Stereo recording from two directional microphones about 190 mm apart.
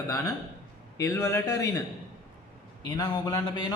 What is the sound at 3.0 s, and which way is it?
Speech, 20° left (ahead or behind).